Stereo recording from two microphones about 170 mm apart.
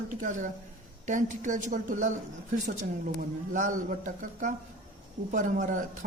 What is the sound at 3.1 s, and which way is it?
A woman's voice, 50° right (ahead or behind).